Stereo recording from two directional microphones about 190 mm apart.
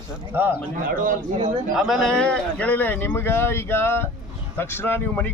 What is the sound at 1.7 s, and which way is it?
A man's voice, centre (ahead or behind).